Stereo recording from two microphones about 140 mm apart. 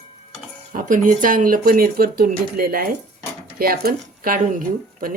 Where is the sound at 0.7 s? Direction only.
70° right (ahead or behind); by 4.6 s 90° right.